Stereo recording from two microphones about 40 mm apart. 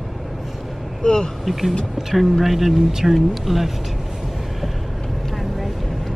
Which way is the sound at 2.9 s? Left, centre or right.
Centre.